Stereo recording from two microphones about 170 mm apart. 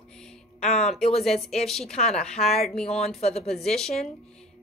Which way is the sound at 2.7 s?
5° left (ahead or behind).